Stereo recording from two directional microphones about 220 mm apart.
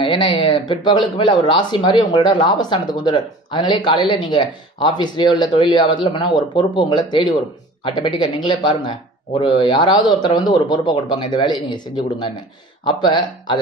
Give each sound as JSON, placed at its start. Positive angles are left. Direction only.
{"t": 0.0, "sound": "speech", "side_deg": 25}